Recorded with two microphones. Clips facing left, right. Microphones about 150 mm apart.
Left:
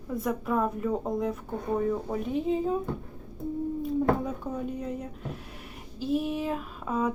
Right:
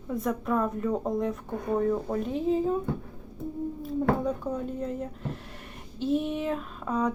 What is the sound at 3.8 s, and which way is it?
Speech, centre (ahead or behind).